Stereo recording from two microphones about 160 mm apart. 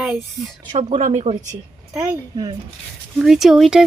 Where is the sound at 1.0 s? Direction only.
50° right (ahead or behind).